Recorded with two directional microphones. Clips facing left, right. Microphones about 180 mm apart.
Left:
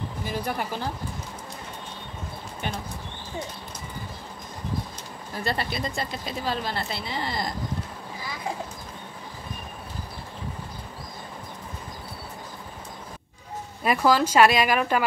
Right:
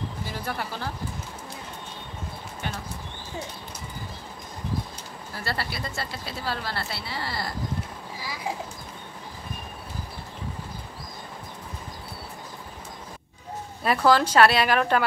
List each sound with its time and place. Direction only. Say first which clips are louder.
0.2 s a woman's voice: left 5 dB; 15° left (ahead or behind)
5.3 s speech: left 3 dB; 20° left (ahead or behind)
13.8 s a woman's voice: even; 10° left (ahead or behind)